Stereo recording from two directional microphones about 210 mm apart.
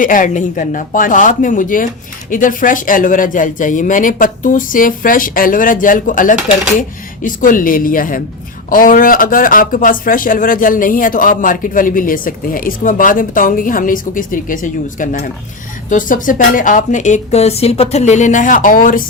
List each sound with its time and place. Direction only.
0.0 s speech: 40° left (ahead or behind)